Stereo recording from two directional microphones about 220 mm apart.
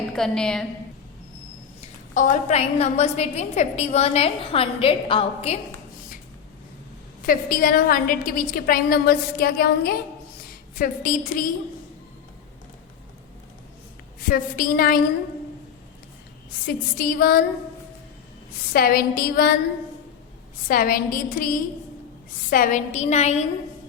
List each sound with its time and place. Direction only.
0.2 s a woman's voice: 5° left (ahead or behind)
2.1 s a woman's voice: 30° left (ahead or behind)
7.3 s a woman's voice: 40° left (ahead or behind)
14.2 s a woman's voice: 40° left (ahead or behind)
16.6 s a sound: 40° left (ahead or behind)
18.7 s a sound: 45° left (ahead or behind)
20.7 s a woman's voice: 40° left (ahead or behind)